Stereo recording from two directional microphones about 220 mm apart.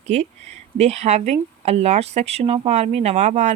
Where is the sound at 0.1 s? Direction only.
30° right (ahead or behind).